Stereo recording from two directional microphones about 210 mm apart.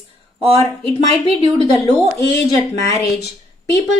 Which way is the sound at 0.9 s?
25° left (ahead or behind).